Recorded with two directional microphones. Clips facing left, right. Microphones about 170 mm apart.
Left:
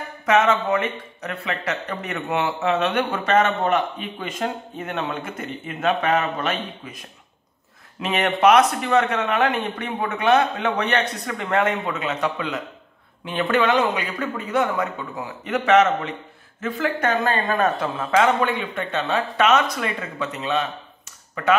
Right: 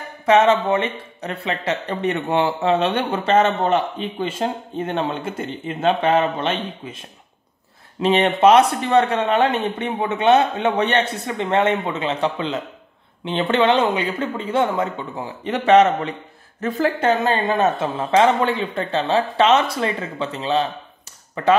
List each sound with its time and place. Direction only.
0.2 s speech: 30° right (ahead or behind)